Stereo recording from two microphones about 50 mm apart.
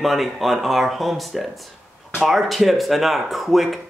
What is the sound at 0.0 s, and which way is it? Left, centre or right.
Speech, centre.